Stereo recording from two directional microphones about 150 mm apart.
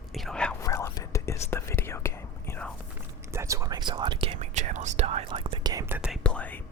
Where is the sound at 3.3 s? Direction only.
20° right (ahead or behind).